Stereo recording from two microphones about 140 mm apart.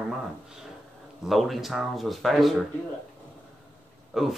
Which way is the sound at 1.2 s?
Centre (ahead or behind).